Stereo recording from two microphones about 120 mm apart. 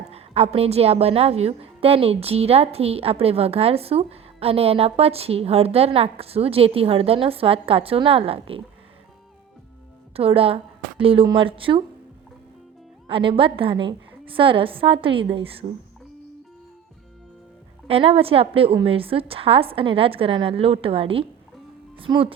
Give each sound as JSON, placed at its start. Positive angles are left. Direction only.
{"t": 0.1, "sound": "a woman's voice", "side_deg": -60}
{"t": 10.2, "sound": "a woman's voice", "side_deg": -55}
{"t": 13.1, "sound": "a woman's voice", "side_deg": -45}
{"t": 17.8, "sound": "a woman's voice", "side_deg": -55}